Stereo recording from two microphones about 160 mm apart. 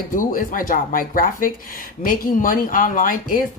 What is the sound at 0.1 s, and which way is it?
Speech, 55° left (ahead or behind).